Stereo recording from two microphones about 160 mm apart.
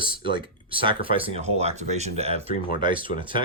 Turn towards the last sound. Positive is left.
turn(degrees=-30)  # may be behind; listen again after turning